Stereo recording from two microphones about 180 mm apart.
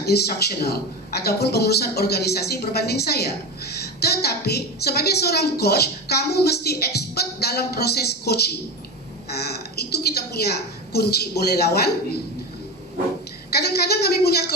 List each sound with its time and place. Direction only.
0.0 s a woman's voice: 60° left (ahead or behind)
13.5 s a woman's voice: 65° left (ahead or behind)